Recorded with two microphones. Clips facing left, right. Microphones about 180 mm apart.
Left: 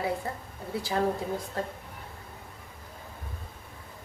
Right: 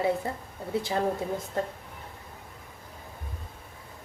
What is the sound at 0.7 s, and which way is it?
Speech, 20° right (ahead or behind).